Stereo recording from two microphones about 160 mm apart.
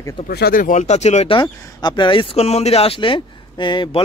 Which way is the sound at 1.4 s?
30° left (ahead or behind).